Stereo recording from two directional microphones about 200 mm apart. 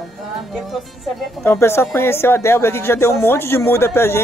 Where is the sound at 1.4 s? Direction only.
10° left (ahead or behind).